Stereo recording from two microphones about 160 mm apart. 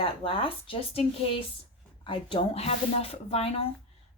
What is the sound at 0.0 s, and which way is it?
Speech, 35° left (ahead or behind).